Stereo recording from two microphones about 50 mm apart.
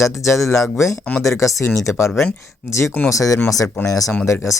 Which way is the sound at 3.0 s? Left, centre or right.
Left.